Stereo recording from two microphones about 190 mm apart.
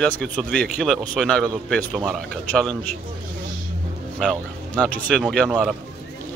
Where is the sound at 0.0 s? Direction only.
5° left (ahead or behind).